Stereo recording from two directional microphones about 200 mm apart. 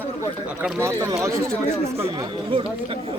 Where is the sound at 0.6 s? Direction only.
10° right (ahead or behind).